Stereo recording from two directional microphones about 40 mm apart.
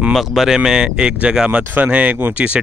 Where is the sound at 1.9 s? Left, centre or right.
Right.